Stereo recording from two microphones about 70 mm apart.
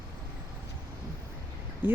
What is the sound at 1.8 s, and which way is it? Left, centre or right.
Speech, right.